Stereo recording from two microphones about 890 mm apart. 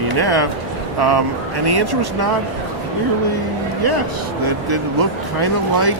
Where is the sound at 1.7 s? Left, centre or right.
Right.